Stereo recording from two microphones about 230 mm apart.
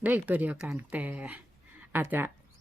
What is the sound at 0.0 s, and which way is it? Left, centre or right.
Speech, centre.